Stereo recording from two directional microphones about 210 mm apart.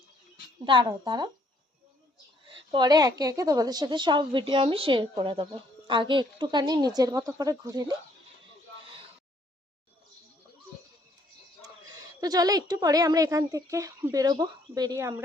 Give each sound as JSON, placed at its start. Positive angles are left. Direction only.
{"t": 0.6, "sound": "a woman's voice", "side_deg": -25}
{"t": 2.5, "sound": "a woman's voice", "side_deg": -20}
{"t": 12.2, "sound": "a woman's voice", "side_deg": -15}